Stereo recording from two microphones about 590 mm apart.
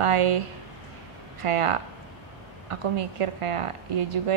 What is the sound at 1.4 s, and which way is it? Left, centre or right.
A woman's voice, right.